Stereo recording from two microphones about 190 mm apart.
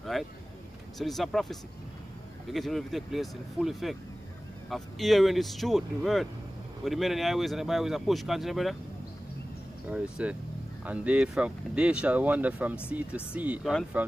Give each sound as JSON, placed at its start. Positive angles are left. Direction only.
{"t": 0.0, "sound": "vehicle", "side_deg": 0}
{"t": 0.9, "sound": "speech", "side_deg": 0}
{"t": 9.8, "sound": "speech", "side_deg": -5}